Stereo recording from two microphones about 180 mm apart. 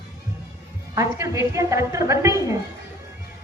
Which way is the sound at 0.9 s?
15° right (ahead or behind).